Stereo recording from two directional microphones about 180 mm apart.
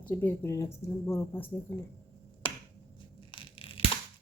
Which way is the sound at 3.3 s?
30° left (ahead or behind).